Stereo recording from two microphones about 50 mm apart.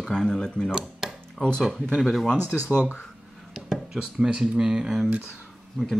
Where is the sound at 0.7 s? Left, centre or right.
Centre.